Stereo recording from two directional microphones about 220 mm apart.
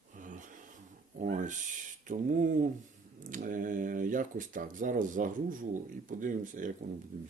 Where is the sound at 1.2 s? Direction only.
35° right (ahead or behind).